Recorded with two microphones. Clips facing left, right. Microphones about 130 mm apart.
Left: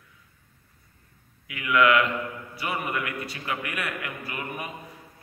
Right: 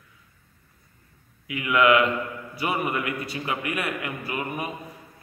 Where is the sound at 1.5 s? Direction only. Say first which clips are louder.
Right 2 dB; 25° right (ahead or behind).